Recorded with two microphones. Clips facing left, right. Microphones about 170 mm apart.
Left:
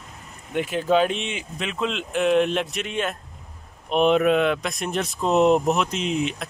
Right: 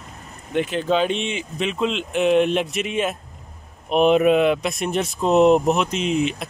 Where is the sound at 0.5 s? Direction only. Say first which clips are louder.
Even; 5° left (ahead or behind).